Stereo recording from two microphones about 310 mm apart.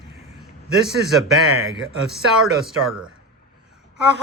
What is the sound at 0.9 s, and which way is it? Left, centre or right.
A man's voice, centre.